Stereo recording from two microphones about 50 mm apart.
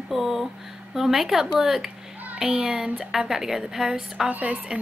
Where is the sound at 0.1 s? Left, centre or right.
Centre.